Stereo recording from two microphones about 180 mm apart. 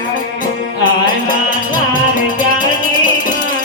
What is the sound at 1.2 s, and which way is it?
Music, 50° left (ahead or behind).